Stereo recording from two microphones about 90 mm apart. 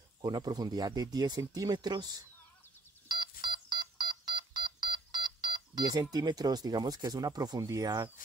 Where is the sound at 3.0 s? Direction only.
55° right (ahead or behind).